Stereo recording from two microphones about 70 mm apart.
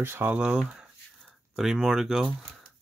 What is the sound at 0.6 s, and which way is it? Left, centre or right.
Speech, centre.